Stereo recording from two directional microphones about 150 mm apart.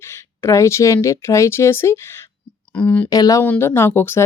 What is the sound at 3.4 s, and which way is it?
Speech, 10° left (ahead or behind).